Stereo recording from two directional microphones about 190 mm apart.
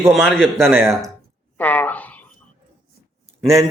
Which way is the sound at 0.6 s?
15° right (ahead or behind).